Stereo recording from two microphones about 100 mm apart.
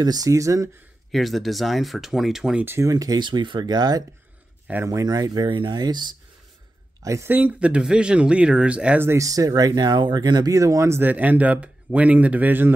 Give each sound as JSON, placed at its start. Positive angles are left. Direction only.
{"t": 0.0, "sound": "speech", "side_deg": -40}
{"t": 1.1, "sound": "speech", "side_deg": 0}
{"t": 2.8, "sound": "speech", "side_deg": -35}
{"t": 7.0, "sound": "speech", "side_deg": -35}
{"t": 7.2, "sound": "speech", "side_deg": -20}
{"t": 9.0, "sound": "speech", "side_deg": -30}
{"t": 10.5, "sound": "speech", "side_deg": -30}